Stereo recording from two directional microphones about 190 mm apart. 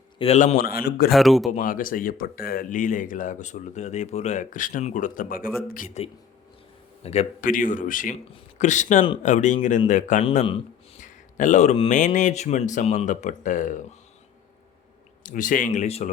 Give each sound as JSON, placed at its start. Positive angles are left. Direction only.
{"t": 0.2, "sound": "speech", "side_deg": 35}
{"t": 1.1, "sound": "speech", "side_deg": 0}
{"t": 1.5, "sound": "speech", "side_deg": 45}
{"t": 10.2, "sound": "a man's voice", "side_deg": 30}
{"t": 11.0, "sound": "speech", "side_deg": 40}
{"t": 15.2, "sound": "speech", "side_deg": 45}